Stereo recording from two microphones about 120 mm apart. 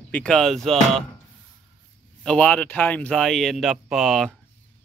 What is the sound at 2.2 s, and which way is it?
Speech, 10° left (ahead or behind).